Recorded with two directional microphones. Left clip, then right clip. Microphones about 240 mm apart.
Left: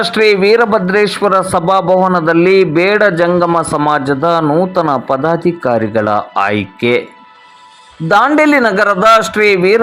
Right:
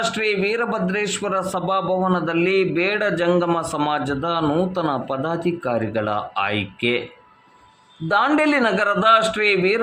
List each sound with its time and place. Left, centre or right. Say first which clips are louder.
0.0 s speech: left 11 dB; left
8.0 s speech: left 9 dB; left